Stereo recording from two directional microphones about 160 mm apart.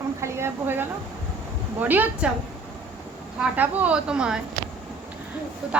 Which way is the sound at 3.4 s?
10° right (ahead or behind).